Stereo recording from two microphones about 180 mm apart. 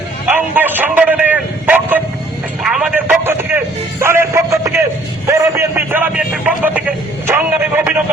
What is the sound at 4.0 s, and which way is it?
Music, 15° right (ahead or behind).